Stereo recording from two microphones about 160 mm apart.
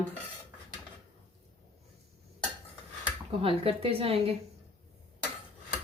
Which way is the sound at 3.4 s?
35° right (ahead or behind).